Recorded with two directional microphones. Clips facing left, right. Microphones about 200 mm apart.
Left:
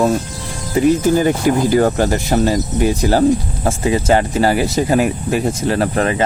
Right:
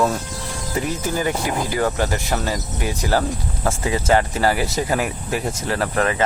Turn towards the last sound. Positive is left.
turn(degrees=25)  # may be behind; listen again after turning